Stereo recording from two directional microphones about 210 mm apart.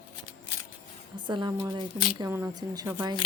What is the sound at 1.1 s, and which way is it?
A woman's voice, 20° right (ahead or behind).